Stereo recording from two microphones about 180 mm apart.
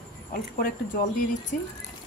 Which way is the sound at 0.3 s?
55° left (ahead or behind).